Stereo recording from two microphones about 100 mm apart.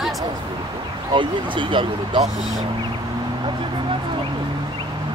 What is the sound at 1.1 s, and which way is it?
Speech, 55° right (ahead or behind).